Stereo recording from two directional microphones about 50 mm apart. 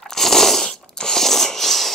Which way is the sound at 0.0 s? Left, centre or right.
Centre.